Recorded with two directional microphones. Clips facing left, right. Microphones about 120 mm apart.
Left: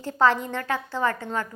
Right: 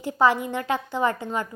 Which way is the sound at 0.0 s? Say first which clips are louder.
Right 1 dB; 15° right (ahead or behind).